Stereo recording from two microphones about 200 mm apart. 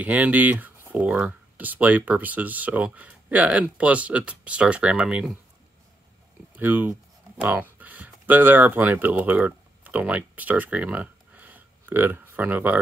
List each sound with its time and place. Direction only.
0.0 s speech: 5° right (ahead or behind)
6.5 s speech: 10° right (ahead or behind)